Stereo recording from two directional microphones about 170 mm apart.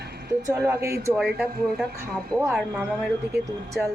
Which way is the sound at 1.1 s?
5° right (ahead or behind).